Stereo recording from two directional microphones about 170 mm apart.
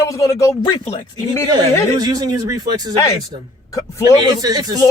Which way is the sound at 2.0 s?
25° right (ahead or behind).